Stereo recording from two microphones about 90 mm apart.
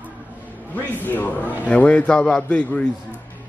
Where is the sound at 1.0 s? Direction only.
20° left (ahead or behind).